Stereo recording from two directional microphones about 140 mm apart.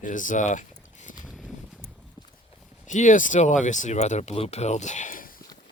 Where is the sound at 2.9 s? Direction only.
60° left (ahead or behind).